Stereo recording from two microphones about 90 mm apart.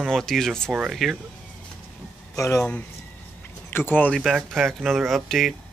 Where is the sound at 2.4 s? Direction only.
30° left (ahead or behind).